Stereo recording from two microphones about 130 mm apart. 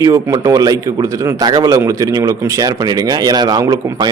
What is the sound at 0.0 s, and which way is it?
Speech, 25° right (ahead or behind).